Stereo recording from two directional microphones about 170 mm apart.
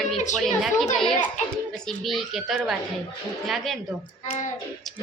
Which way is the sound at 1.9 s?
Centre (ahead or behind).